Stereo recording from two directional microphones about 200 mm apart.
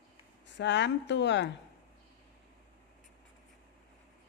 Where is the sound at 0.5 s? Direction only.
60° left (ahead or behind).